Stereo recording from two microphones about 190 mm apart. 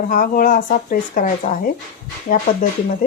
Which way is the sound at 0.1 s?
45° left (ahead or behind).